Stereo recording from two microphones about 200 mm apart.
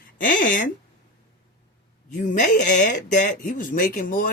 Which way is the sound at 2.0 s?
40° left (ahead or behind).